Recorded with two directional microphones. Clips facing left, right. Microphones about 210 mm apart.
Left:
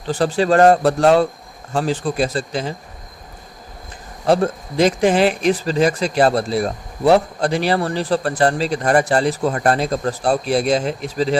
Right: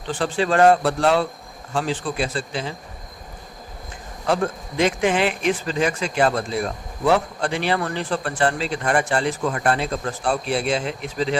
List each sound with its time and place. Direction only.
0.1 s speech: 40° left (ahead or behind)
4.3 s speech: 35° left (ahead or behind)